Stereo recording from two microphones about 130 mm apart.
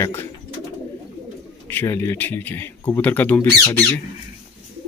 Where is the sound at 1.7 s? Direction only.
15° left (ahead or behind).